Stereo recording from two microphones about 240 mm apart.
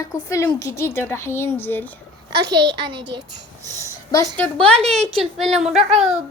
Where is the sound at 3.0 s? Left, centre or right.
Right.